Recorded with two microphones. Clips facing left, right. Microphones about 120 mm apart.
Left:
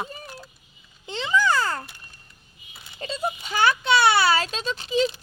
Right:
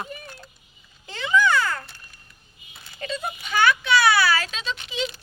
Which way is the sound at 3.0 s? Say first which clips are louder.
Left 2 dB; 30° left (ahead or behind).